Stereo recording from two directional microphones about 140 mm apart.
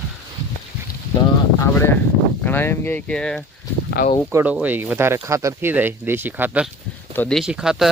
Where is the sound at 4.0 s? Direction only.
90° left.